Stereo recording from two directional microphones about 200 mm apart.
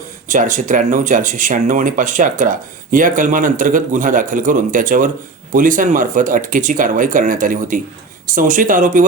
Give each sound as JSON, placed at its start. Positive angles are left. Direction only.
{"t": 0.3, "sound": "speech", "side_deg": -40}